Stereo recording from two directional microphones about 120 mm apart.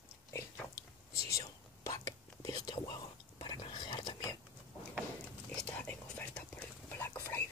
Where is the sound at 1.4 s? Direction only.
30° left (ahead or behind).